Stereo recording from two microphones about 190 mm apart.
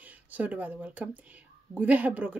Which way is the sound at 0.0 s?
10° right (ahead or behind).